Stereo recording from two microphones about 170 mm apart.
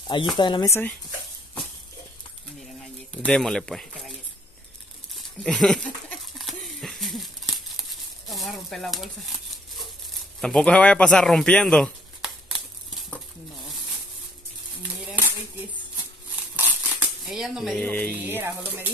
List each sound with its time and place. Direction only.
0.4 s speech: 25° left (ahead or behind)
0.7 s speech: 10° left (ahead or behind)
3.2 s speech: 5° left (ahead or behind)
5.1 s a sound: 5° left (ahead or behind)
10.4 s a sound: 5° left (ahead or behind)
16.5 s coin: 5° right (ahead or behind)
17.8 s speech: 10° left (ahead or behind)
18.1 s speech: 10° right (ahead or behind)